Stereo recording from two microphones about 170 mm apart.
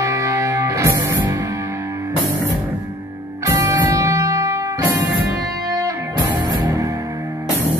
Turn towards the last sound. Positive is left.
turn(degrees=-20)  # may be behind; listen again after turning